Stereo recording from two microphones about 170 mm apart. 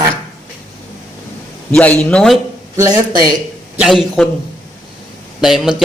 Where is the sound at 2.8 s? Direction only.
20° right (ahead or behind).